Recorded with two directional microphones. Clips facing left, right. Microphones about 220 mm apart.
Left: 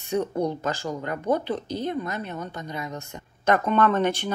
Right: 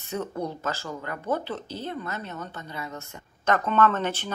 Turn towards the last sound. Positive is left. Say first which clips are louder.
# left 3 dB
turn(degrees=15)  # may be behind; listen again after turning